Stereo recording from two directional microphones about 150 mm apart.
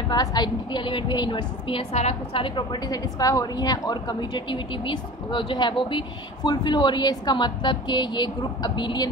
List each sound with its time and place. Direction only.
0.1 s a woman's voice: 25° left (ahead or behind)